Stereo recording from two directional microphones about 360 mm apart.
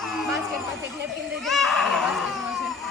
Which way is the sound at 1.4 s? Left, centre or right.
Centre.